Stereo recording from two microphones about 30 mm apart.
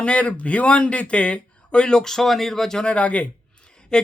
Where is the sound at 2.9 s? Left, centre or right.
Left.